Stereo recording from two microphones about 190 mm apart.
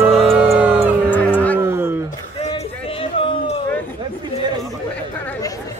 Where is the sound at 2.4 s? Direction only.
30° left (ahead or behind).